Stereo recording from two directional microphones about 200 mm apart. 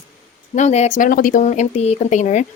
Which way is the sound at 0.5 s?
35° left (ahead or behind).